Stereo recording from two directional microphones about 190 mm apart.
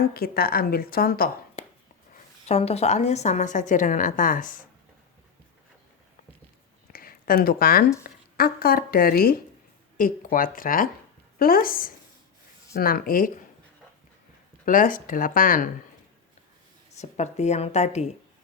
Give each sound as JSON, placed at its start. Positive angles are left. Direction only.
{"t": 0.0, "sound": "speech", "side_deg": 50}
{"t": 2.5, "sound": "a woman's voice", "side_deg": 35}
{"t": 6.9, "sound": "a sound", "side_deg": 50}
{"t": 8.0, "sound": "speech", "side_deg": 50}
{"t": 14.6, "sound": "speech", "side_deg": 45}
{"t": 17.0, "sound": "a woman's voice", "side_deg": 35}